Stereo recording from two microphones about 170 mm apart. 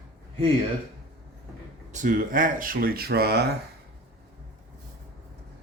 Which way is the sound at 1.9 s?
50° right (ahead or behind).